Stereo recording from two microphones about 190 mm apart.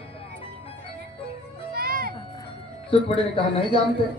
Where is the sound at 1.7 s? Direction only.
50° right (ahead or behind).